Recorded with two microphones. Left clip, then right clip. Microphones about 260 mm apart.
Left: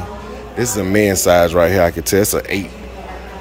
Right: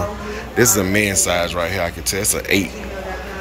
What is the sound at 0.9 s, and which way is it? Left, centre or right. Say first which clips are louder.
Speech: left 6 dB; left.